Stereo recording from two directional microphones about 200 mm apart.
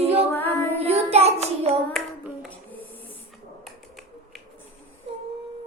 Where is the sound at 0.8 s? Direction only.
30° right (ahead or behind).